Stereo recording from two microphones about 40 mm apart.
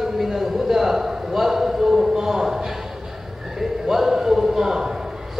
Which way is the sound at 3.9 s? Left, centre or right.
Centre.